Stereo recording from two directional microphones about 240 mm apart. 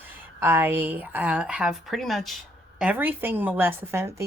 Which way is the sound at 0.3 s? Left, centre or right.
Centre.